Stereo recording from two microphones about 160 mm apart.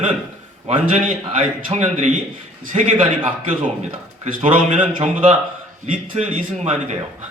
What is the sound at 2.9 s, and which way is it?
Speech, 35° right (ahead or behind).